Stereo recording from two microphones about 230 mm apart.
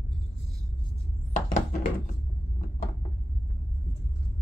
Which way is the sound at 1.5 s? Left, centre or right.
Left.